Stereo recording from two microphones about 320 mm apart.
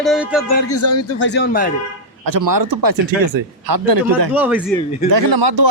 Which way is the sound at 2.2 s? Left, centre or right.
Right.